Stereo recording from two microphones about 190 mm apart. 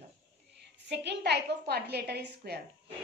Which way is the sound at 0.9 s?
65° right (ahead or behind).